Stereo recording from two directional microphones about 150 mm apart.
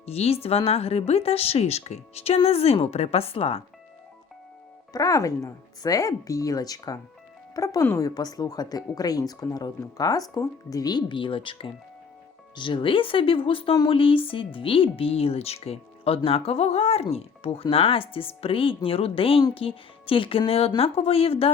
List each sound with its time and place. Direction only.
0.0 s speech: 45° left (ahead or behind)
4.9 s speech: 25° left (ahead or behind); by 21.5 s 40° left (ahead or behind)